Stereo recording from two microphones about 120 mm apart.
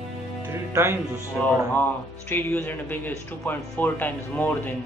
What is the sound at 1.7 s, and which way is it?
Speech, 15° left (ahead or behind).